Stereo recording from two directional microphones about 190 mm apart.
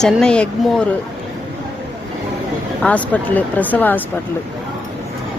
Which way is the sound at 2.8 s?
5° left (ahead or behind).